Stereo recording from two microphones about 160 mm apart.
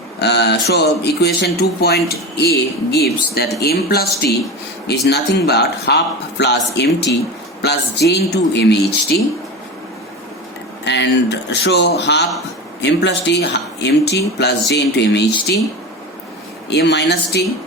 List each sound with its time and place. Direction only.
0.2 s a woman's voice: 90° left
5.0 s speech: 90° left
10.8 s speech: 90° left
16.6 s speech: 90° left